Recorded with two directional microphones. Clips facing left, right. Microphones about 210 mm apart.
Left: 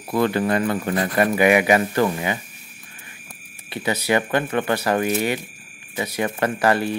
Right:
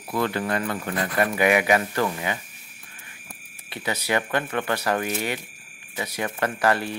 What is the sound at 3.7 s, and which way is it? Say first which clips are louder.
Speech: left 5 dB; 15° left (ahead or behind).